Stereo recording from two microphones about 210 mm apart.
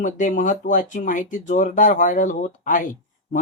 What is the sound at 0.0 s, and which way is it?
Speech, 35° left (ahead or behind).